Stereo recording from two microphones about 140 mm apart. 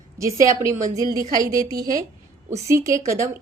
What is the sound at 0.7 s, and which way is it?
Speech, 55° right (ahead or behind).